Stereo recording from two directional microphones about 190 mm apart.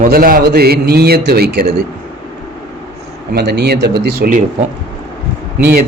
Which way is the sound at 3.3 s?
60° right (ahead or behind).